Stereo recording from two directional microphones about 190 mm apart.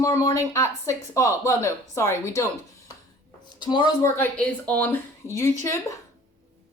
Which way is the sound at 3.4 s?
25° left (ahead or behind).